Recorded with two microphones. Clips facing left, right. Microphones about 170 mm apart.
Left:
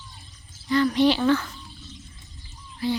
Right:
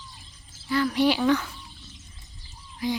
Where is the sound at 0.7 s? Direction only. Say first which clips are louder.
Left 3 dB; 5° right (ahead or behind).